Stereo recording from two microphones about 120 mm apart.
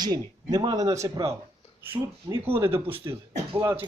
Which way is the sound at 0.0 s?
35° right (ahead or behind).